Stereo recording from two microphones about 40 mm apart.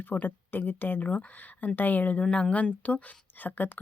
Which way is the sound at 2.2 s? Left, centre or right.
Left.